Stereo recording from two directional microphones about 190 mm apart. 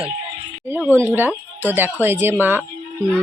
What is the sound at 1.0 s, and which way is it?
Speech, 10° right (ahead or behind).